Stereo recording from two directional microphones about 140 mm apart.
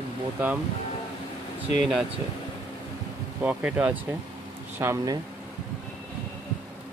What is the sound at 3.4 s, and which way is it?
Speech, 10° right (ahead or behind).